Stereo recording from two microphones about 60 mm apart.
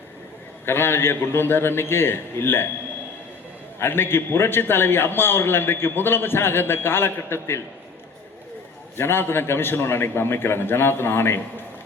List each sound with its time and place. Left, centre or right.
0.6 s a man's voice: left
3.8 s a man's voice: left
9.0 s a man's voice: left